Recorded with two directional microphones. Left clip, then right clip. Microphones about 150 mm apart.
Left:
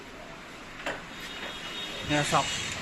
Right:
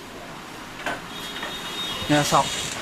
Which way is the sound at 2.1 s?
25° right (ahead or behind).